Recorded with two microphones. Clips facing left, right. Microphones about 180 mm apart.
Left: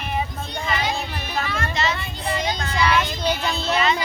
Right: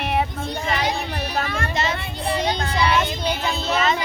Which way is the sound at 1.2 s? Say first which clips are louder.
Right 2 dB; 40° right (ahead or behind).